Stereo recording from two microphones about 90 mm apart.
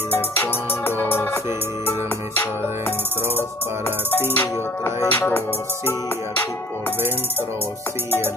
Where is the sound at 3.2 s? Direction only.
25° right (ahead or behind).